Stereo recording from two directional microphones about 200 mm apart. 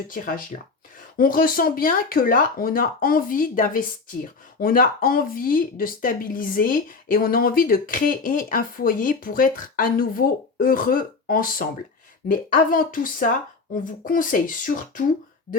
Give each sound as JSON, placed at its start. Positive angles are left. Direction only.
{"t": 0.1, "sound": "speech", "side_deg": 45}